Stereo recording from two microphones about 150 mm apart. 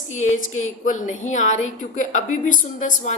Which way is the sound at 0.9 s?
55° left (ahead or behind).